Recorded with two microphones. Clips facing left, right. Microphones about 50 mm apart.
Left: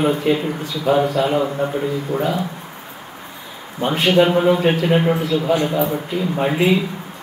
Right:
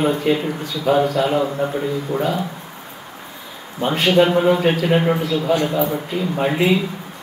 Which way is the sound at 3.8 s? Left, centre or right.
Centre.